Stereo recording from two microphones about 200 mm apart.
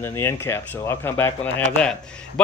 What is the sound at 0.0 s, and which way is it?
A man's voice, 15° left (ahead or behind).